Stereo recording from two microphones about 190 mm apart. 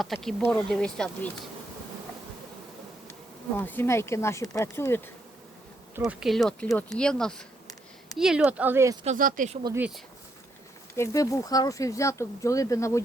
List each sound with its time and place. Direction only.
0.0 s speech: centre (ahead or behind)
3.6 s speech: 10° left (ahead or behind)
6.0 s speech: centre (ahead or behind)
9.0 s speech: 45° right (ahead or behind)
9.7 s speech: 5° right (ahead or behind)
10.9 s speech: 15° left (ahead or behind)